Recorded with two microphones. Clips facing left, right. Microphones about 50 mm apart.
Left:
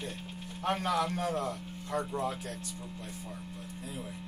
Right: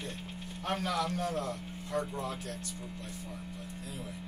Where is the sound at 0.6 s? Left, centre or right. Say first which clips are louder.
Left 3 dB; left.